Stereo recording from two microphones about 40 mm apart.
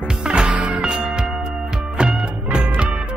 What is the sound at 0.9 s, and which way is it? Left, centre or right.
Music, centre.